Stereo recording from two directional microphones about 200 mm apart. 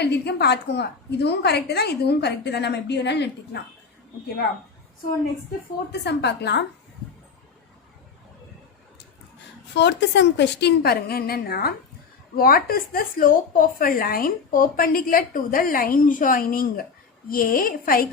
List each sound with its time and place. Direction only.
0.0 s a woman's voice: 55° left (ahead or behind)
5.9 s a woman's voice: 55° left (ahead or behind)
9.7 s a woman's voice: 60° left (ahead or behind)